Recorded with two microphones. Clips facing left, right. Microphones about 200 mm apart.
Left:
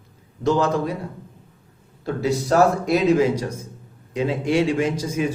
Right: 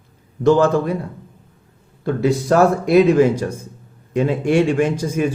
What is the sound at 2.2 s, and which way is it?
A man's voice, 55° right (ahead or behind).